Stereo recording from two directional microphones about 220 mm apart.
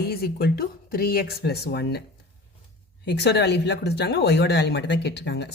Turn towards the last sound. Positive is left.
turn(degrees=50)  # may be behind; listen again after turning